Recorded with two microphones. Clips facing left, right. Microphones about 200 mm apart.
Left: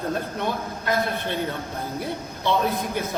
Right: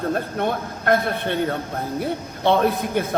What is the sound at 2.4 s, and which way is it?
Speech, 55° right (ahead or behind).